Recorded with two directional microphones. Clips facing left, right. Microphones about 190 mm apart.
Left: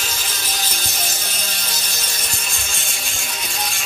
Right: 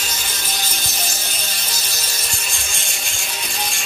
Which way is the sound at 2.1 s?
Centre (ahead or behind).